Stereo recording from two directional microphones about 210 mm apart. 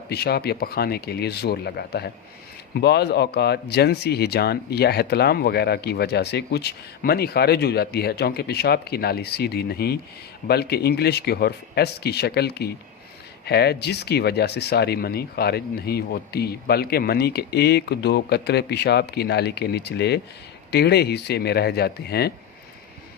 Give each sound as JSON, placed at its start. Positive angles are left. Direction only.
{"t": 0.1, "sound": "speech", "side_deg": 50}